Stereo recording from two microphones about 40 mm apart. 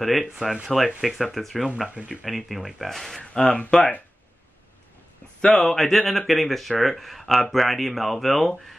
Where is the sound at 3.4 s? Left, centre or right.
Left.